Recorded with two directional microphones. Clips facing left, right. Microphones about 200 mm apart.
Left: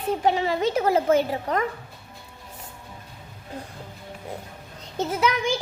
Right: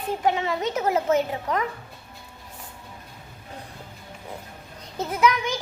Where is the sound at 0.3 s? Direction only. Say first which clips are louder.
Left 2 dB; 30° left (ahead or behind).